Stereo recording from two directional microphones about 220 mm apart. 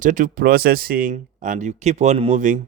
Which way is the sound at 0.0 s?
35° right (ahead or behind).